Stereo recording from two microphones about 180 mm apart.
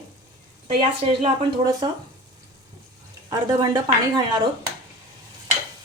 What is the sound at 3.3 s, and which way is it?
A woman's voice, 20° right (ahead or behind).